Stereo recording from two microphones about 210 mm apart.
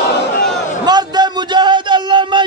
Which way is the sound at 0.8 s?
20° right (ahead or behind).